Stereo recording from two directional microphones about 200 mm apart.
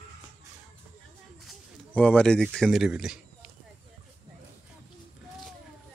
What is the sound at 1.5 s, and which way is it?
Speech, 5° left (ahead or behind).